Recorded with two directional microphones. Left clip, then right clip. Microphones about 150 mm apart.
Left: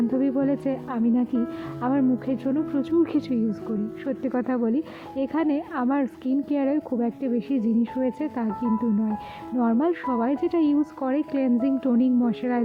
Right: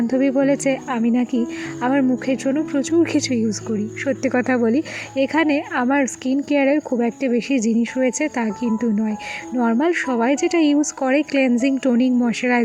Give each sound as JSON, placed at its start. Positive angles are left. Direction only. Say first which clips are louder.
{"t": 0.1, "sound": "speech", "louder": "right 6 dB", "side_deg": -15}